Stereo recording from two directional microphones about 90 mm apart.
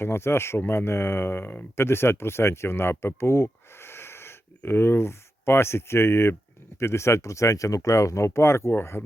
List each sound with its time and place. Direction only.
0.0 s speech: 30° left (ahead or behind)